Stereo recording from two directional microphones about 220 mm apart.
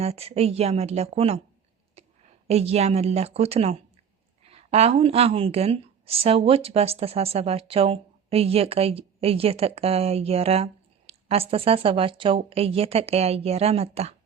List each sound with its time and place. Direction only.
0.0 s a woman's voice: 25° right (ahead or behind)
2.0 s a sound: 25° right (ahead or behind)
2.5 s a woman's voice: 30° right (ahead or behind)